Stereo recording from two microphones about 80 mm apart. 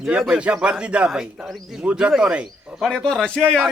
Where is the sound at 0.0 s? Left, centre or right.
Centre.